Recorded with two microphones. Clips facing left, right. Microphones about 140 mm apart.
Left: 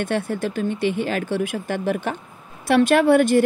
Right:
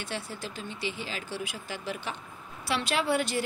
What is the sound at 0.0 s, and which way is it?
Speech, 55° left (ahead or behind).